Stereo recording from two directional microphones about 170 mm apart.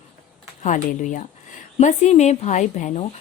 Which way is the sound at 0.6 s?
45° left (ahead or behind).